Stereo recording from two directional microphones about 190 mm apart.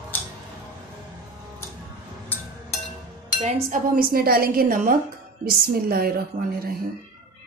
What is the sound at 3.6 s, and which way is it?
A woman's voice, 45° right (ahead or behind).